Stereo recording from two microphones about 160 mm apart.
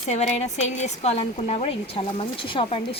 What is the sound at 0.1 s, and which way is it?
A woman's voice, 45° left (ahead or behind).